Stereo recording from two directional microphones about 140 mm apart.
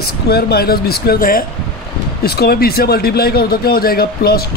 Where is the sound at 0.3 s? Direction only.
90° left.